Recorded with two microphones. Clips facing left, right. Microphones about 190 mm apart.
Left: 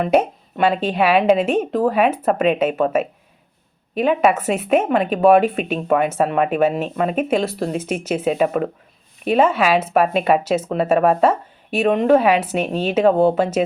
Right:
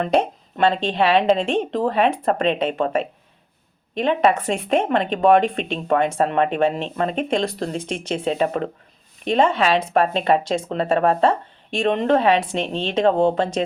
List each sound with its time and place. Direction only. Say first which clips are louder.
0.0 s speech: left 3 dB; 5° left (ahead or behind)